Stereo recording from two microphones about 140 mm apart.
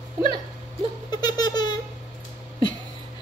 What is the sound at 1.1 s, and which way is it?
Giggle, 30° left (ahead or behind).